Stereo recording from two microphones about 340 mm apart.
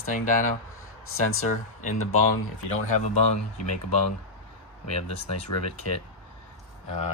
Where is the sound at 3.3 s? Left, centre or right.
Left.